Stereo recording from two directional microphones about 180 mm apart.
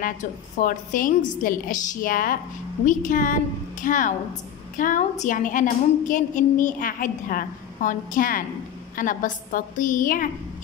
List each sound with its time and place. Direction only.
0.6 s a woman's voice: 50° left (ahead or behind)